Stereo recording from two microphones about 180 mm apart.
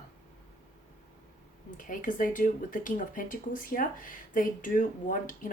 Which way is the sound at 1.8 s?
50° left (ahead or behind).